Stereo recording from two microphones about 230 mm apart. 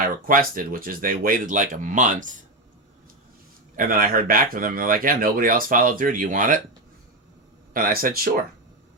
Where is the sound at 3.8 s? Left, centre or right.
Right.